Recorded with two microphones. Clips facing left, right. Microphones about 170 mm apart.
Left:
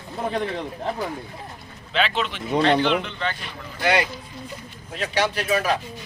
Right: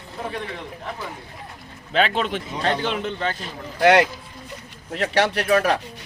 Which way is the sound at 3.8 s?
70° right (ahead or behind).